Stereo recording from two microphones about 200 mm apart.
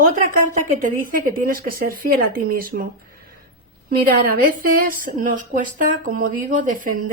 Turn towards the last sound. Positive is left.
turn(degrees=-40)  # may be behind; listen again after turning